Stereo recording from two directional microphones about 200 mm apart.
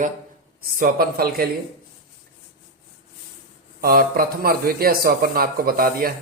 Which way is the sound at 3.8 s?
45° right (ahead or behind).